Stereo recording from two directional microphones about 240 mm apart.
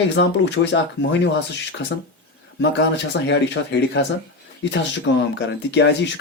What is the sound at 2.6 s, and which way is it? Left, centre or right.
Speech, left.